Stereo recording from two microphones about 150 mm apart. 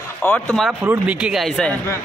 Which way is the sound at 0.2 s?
15° left (ahead or behind).